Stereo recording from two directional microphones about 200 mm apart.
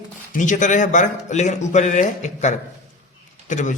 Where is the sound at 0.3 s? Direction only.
40° left (ahead or behind).